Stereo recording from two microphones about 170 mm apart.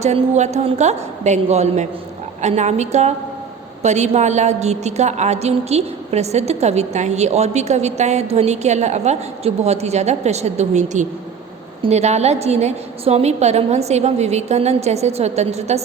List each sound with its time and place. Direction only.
0.0 s a woman's voice: 40° right (ahead or behind)